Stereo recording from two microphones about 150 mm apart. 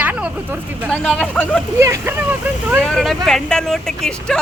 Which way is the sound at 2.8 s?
Centre (ahead or behind).